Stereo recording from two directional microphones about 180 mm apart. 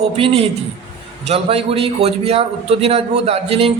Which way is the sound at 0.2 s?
30° right (ahead or behind).